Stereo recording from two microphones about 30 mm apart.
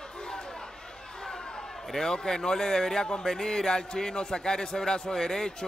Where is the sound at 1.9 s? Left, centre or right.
Centre.